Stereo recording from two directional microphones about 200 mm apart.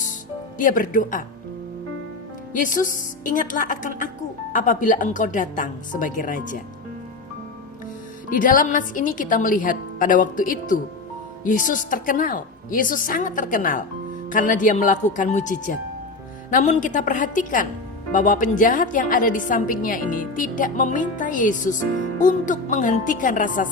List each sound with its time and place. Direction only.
0.6 s a woman's voice: 40° left (ahead or behind)
2.6 s a woman's voice: 40° left (ahead or behind)
8.3 s a woman's voice: 40° left (ahead or behind)